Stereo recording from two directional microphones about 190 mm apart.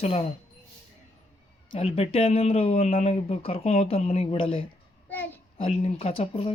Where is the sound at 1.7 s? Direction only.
30° left (ahead or behind).